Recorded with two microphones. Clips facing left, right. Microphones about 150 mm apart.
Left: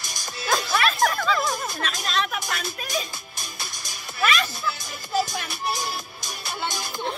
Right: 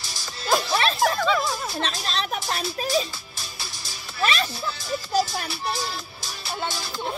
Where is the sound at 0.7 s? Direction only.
30° right (ahead or behind).